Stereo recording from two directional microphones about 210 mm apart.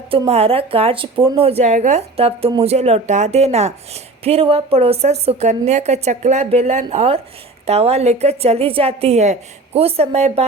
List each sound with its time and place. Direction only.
0.1 s a woman's voice: 30° right (ahead or behind)